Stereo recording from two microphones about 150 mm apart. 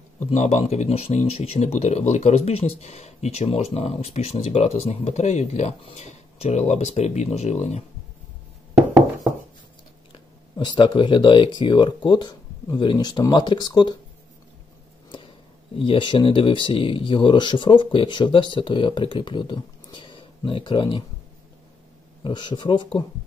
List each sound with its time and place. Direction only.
0.3 s speech: 50° left (ahead or behind)
10.5 s speech: 30° left (ahead or behind)
15.0 s speech: 35° left (ahead or behind)
22.2 s speech: 30° left (ahead or behind)